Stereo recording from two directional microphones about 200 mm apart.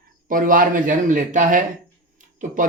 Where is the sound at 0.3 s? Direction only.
45° right (ahead or behind).